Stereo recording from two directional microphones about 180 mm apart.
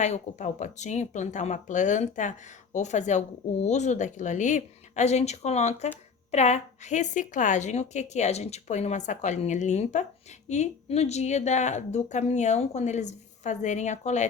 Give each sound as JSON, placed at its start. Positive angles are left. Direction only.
{"t": 0.0, "sound": "a woman's voice", "side_deg": 40}